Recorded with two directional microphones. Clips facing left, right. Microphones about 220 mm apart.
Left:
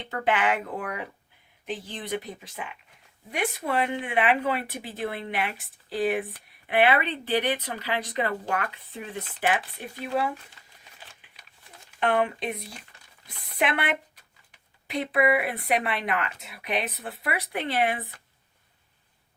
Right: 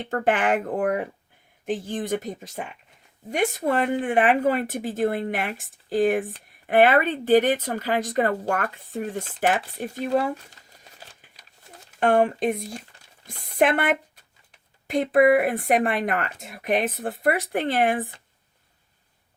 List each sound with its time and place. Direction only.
0.0 s speech: 45° right (ahead or behind)
11.1 s a sound: 40° right (ahead or behind)
11.9 s speech: 45° right (ahead or behind)